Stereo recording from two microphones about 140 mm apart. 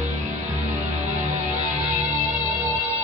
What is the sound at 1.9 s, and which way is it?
Music, 60° right (ahead or behind).